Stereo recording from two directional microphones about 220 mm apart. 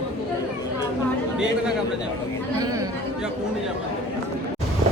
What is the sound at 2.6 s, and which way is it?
Speech, 15° right (ahead or behind).